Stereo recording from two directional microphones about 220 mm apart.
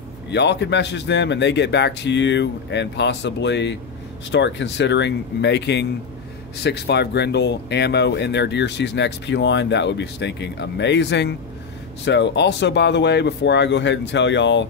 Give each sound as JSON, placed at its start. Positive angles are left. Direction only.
{"t": 0.3, "sound": "speech", "side_deg": 50}